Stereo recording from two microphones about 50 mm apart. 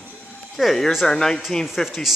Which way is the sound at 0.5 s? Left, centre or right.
Centre.